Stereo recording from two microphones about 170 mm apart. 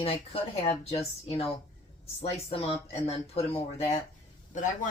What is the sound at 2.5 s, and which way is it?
Speech, 35° left (ahead or behind).